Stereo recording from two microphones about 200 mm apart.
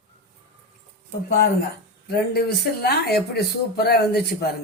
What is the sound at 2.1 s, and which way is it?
Speech, 55° left (ahead or behind).